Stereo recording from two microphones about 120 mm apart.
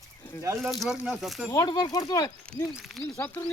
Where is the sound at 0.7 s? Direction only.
Centre (ahead or behind).